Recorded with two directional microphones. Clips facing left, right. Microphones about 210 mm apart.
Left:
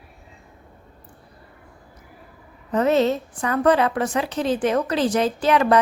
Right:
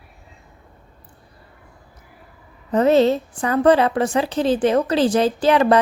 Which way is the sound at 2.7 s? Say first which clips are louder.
Right 4 dB; 30° right (ahead or behind).